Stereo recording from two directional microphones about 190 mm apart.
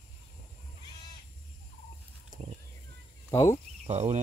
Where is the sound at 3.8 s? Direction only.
35° right (ahead or behind).